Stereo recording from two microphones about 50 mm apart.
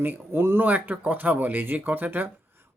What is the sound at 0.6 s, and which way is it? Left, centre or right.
Speech, right.